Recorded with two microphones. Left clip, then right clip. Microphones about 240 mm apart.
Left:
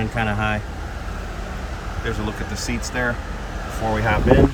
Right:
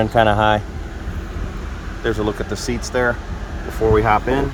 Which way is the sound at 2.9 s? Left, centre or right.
Right.